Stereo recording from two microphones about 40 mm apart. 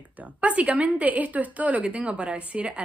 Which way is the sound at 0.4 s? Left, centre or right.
Right.